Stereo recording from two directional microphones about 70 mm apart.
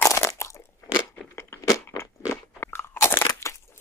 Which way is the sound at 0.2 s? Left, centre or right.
Left.